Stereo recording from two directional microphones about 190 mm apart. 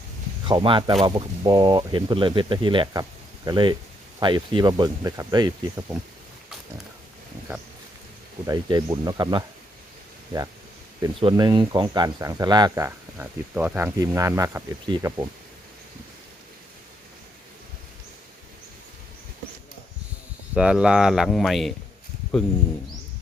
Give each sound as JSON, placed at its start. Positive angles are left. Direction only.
{"t": 0.4, "sound": "speech", "side_deg": -25}
{"t": 8.4, "sound": "speech", "side_deg": -20}
{"t": 11.0, "sound": "speech", "side_deg": -25}
{"t": 20.6, "sound": "speech", "side_deg": -5}